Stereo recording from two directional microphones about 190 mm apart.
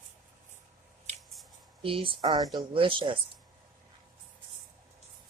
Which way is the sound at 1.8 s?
30° right (ahead or behind).